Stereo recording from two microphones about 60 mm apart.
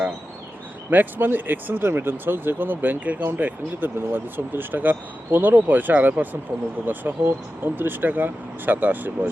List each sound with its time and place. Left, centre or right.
0.9 s speech: right